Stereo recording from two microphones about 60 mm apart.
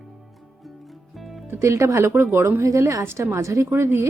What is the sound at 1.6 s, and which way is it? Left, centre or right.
A woman's voice, right.